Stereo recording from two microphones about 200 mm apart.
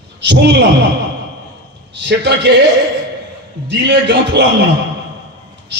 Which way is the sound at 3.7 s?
60° right (ahead or behind).